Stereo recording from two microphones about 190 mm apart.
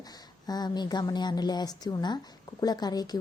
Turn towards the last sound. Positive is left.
turn(degrees=20)  # may be behind; listen again after turning